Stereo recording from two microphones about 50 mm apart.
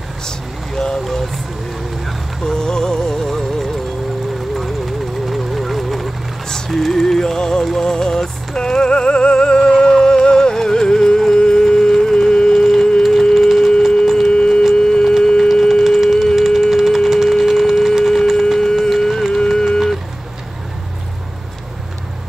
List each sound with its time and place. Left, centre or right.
0.7 s a sound: centre
2.4 s music: centre
4.6 s vehicle: centre
6.5 s music: centre
14.8 s tuning fork: centre
15.7 s music: centre
17.5 s a sound: centre
18.6 s music: centre